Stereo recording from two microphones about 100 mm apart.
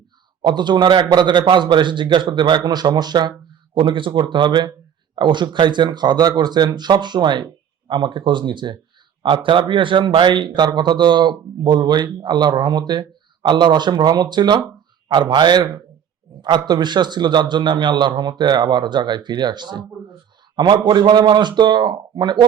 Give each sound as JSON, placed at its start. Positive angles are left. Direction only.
{"t": 0.4, "sound": "speech", "side_deg": -50}